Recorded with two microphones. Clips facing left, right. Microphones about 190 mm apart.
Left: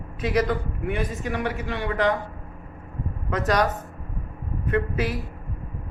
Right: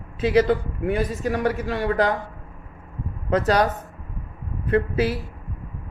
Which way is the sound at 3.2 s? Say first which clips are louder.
Right 3 dB; 30° right (ahead or behind).